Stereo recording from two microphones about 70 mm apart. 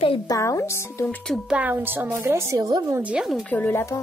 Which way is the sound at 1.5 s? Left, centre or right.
Right.